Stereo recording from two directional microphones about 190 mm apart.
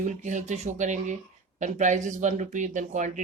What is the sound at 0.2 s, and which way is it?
Speech, 40° right (ahead or behind).